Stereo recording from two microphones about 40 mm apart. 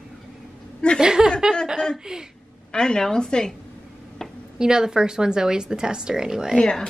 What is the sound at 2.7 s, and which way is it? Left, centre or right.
Speech, centre.